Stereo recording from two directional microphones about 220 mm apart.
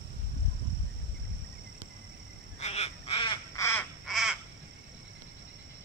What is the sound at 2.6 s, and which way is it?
Crow, 30° left (ahead or behind).